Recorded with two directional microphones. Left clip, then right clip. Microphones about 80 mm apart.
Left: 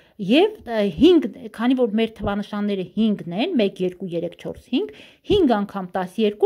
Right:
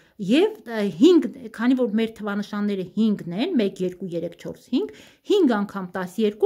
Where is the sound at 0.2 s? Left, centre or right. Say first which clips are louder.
Left 3 dB; left.